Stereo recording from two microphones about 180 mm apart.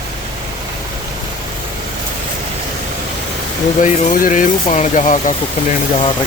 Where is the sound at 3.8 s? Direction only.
45° left (ahead or behind).